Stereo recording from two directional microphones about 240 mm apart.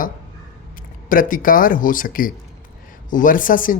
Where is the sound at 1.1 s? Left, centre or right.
Left.